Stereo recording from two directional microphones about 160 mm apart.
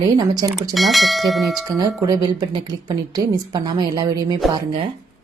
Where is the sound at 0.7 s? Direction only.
Centre (ahead or behind).